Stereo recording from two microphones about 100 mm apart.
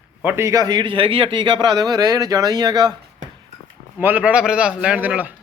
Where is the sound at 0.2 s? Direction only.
20° right (ahead or behind); by 2.9 s 45° right (ahead or behind).